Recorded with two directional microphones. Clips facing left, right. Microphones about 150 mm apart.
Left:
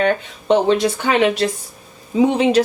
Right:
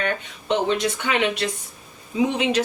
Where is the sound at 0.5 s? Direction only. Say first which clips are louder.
Left 7 dB; 35° left (ahead or behind).